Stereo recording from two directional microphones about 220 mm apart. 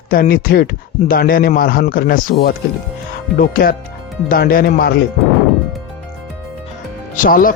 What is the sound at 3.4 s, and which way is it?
Speech, 40° left (ahead or behind).